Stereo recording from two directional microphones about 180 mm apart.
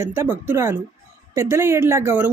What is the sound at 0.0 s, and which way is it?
Speech, 15° right (ahead or behind).